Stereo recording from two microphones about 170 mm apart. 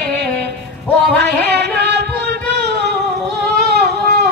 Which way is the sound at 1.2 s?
80° right.